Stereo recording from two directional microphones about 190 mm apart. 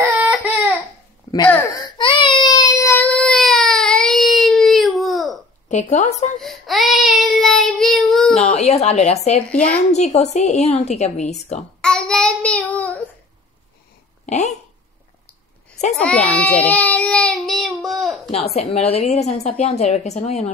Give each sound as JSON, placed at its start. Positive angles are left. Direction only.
{"t": 0.0, "sound": "baby cry", "side_deg": -10}
{"t": 1.3, "sound": "a sound", "side_deg": 20}
{"t": 1.7, "sound": "baby cry", "side_deg": 25}
{"t": 5.7, "sound": "a woman's voice", "side_deg": 40}
{"t": 6.4, "sound": "child singing", "side_deg": 0}
{"t": 8.4, "sound": "a woman's voice", "side_deg": 35}
{"t": 11.8, "sound": "child singing", "side_deg": 5}
{"t": 14.2, "sound": "speech", "side_deg": 35}
{"t": 15.9, "sound": "baby cry", "side_deg": 5}
{"t": 18.3, "sound": "a woman's voice", "side_deg": 35}